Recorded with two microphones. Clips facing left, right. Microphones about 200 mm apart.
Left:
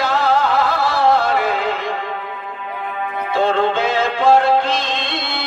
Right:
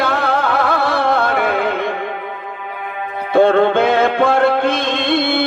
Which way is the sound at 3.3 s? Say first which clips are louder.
Right 6 dB; 55° right (ahead or behind).